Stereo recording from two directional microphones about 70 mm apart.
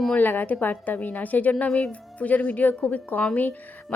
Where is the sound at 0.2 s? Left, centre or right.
Left.